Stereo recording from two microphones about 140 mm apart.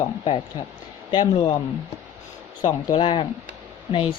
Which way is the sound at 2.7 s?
30° left (ahead or behind).